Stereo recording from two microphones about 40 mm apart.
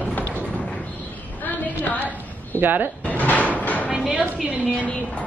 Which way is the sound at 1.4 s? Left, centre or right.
Left.